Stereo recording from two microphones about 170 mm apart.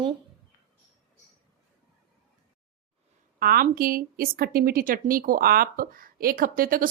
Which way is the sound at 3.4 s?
60° right (ahead or behind).